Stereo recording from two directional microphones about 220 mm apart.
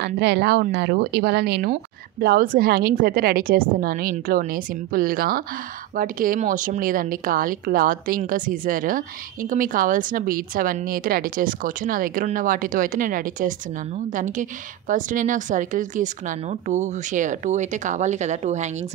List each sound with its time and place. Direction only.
0.0 s speech: 50° right (ahead or behind); by 18.9 s 30° right (ahead or behind)